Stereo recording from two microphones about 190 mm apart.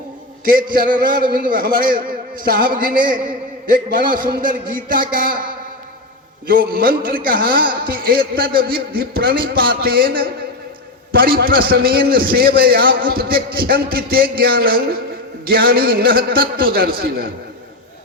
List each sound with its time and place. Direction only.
0.4 s a man's voice: 45° right (ahead or behind)